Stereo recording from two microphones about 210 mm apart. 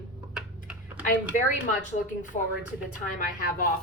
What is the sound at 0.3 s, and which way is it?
Computer keyboard, 5° right (ahead or behind).